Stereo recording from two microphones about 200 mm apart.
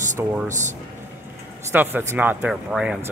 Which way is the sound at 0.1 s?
40° right (ahead or behind).